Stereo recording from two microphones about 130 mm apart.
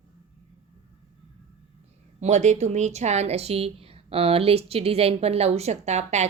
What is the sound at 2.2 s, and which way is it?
Speech, 65° right (ahead or behind).